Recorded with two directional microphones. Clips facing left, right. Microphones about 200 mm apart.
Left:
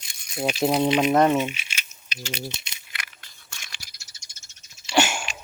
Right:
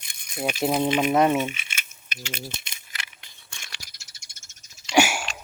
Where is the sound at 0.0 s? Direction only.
55° right (ahead or behind).